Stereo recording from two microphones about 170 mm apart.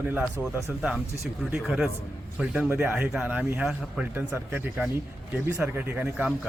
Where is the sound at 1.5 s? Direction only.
Centre (ahead or behind).